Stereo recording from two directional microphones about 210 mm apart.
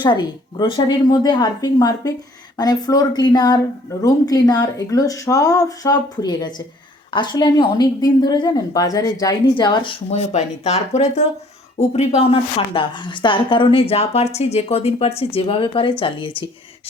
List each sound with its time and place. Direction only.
0.0 s a woman's voice: 20° left (ahead or behind)